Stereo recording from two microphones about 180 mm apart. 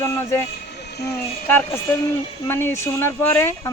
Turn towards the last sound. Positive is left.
turn(degrees=10)  # may be behind; listen again after turning